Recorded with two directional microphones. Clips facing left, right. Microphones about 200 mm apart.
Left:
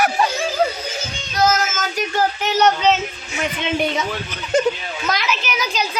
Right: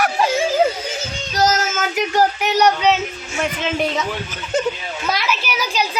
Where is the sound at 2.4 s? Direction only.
10° right (ahead or behind).